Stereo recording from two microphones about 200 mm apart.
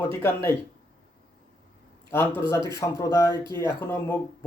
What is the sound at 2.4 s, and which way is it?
Speech, 15° left (ahead or behind).